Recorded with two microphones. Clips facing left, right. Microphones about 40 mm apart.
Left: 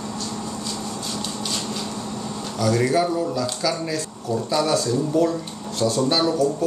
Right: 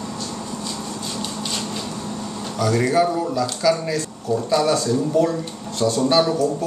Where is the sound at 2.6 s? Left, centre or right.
Centre.